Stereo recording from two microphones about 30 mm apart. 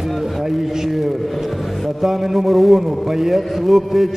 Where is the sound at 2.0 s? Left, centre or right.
Centre.